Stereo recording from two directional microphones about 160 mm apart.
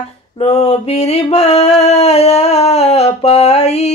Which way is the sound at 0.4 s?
40° left (ahead or behind).